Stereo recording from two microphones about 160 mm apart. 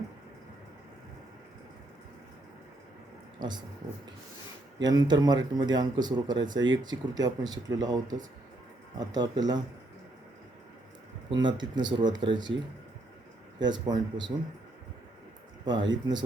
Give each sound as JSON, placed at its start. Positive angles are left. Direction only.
{"t": 3.4, "sound": "speech", "side_deg": -30}
{"t": 4.8, "sound": "speech", "side_deg": -25}
{"t": 11.3, "sound": "speech", "side_deg": -30}
{"t": 13.6, "sound": "speech", "side_deg": -25}
{"t": 15.6, "sound": "speech", "side_deg": -25}